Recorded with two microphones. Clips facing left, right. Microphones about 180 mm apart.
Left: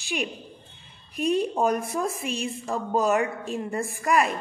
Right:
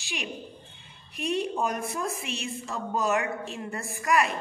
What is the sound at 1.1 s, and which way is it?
A woman's voice, 40° left (ahead or behind).